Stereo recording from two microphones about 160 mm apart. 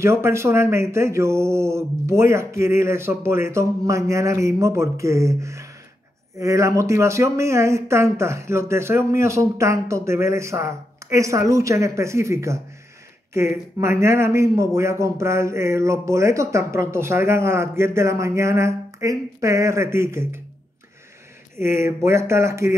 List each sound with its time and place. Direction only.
0.0 s speech: 15° right (ahead or behind)
21.5 s speech: 15° right (ahead or behind)